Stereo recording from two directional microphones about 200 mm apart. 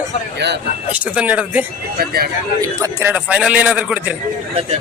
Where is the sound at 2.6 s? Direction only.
15° right (ahead or behind).